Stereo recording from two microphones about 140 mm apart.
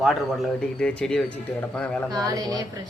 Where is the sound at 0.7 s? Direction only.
5° left (ahead or behind).